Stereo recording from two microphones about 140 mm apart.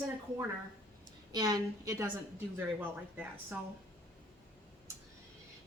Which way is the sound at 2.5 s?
10° right (ahead or behind).